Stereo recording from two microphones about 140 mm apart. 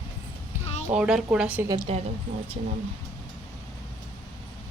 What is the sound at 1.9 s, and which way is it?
Speech, 45° right (ahead or behind).